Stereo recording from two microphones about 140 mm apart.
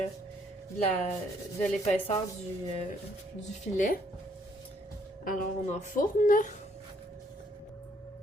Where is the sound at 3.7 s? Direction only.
70° left (ahead or behind).